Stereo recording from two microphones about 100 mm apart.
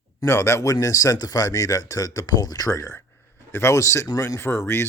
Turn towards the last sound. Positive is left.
turn(degrees=25)  # may be behind; listen again after turning